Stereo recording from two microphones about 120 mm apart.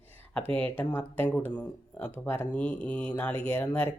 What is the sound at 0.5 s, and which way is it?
Speech, 15° left (ahead or behind).